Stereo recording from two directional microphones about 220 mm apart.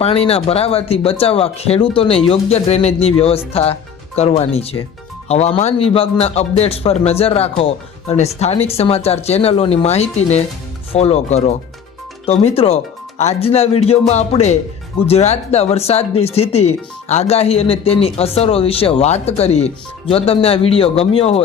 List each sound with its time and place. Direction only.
0.0 s speech: 25° left (ahead or behind)